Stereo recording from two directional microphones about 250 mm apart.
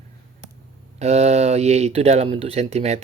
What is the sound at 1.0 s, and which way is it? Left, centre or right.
Speech, right.